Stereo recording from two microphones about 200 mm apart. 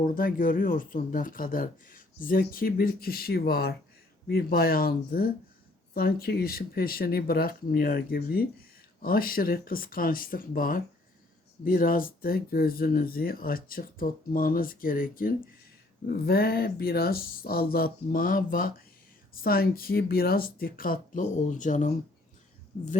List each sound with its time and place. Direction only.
0.0 s speech: 45° left (ahead or behind)